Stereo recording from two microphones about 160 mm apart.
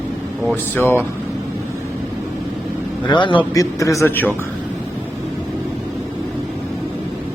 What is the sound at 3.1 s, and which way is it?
A man's voice, 30° left (ahead or behind).